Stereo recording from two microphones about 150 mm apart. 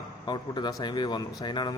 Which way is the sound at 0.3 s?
30° left (ahead or behind).